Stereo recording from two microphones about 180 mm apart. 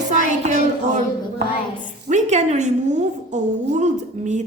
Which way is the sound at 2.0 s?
40° right (ahead or behind).